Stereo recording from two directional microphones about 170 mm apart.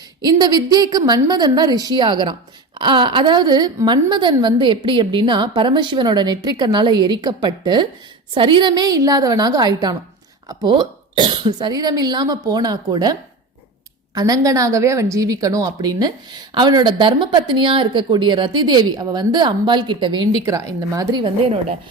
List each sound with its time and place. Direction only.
0.2 s a woman's voice: 25° right (ahead or behind)
14.2 s a woman's voice: 20° right (ahead or behind)